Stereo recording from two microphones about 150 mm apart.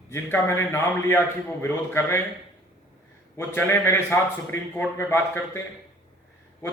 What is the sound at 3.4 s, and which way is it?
A man's voice, 15° left (ahead or behind).